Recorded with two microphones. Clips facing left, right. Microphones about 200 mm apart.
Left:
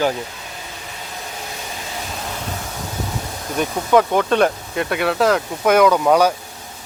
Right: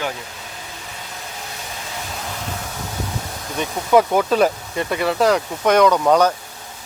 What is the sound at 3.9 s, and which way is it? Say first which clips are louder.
Speech: right 1 dB; 5° right (ahead or behind).